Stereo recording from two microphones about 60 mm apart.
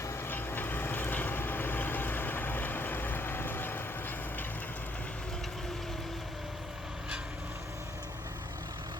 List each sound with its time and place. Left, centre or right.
0.3 s vehicle: left